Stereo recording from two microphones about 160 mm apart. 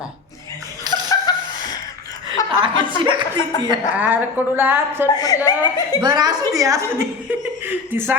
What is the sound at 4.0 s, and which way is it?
Speech, 10° right (ahead or behind).